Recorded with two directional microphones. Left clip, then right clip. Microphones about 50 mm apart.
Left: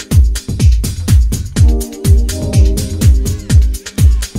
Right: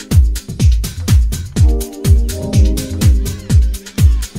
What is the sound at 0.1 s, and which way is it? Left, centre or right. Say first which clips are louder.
Music: even; left.